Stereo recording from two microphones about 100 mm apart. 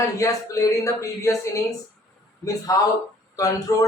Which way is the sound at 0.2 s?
35° left (ahead or behind).